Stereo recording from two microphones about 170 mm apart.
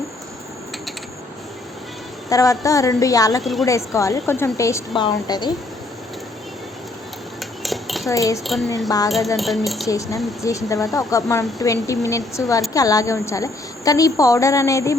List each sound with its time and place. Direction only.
2.3 s speech: 20° left (ahead or behind)
3.4 s speech: centre (ahead or behind)
3.7 s a woman's voice: 15° left (ahead or behind)
7.6 s cutlery: centre (ahead or behind)
8.1 s speech: 20° left (ahead or behind)
9.0 s speech: centre (ahead or behind)
9.8 s speech: 20° left (ahead or behind)